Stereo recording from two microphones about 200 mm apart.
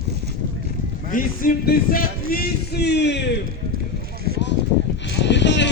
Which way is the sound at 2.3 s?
50° left (ahead or behind).